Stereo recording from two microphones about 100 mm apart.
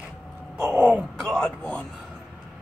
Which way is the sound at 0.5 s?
25° right (ahead or behind).